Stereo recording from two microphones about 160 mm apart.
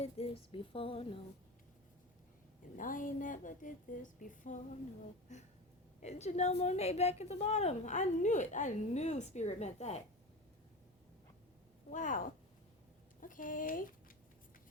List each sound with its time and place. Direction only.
0.0 s a sound: 40° left (ahead or behind)
2.7 s a woman's voice: 55° left (ahead or behind)
6.0 s a woman's voice: 45° left (ahead or behind)
11.9 s a woman's voice: 55° left (ahead or behind)